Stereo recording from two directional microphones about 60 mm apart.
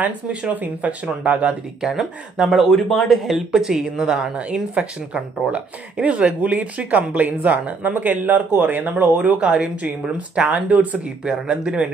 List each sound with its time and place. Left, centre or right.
0.5 s speech: right
1.8 s speech: centre
4.7 s speech: centre